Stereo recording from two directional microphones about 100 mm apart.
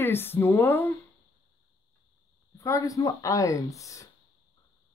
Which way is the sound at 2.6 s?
35° left (ahead or behind).